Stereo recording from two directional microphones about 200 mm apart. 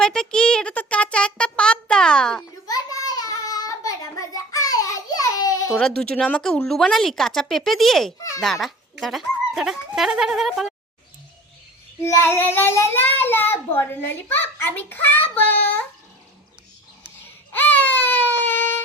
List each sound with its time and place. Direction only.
0.0 s music: 5° left (ahead or behind)
2.6 s child singing: 20° left (ahead or behind)
5.8 s speech: 5° left (ahead or behind)
12.0 s a child's voice: 10° left (ahead or behind)
17.5 s baby cry: 10° left (ahead or behind)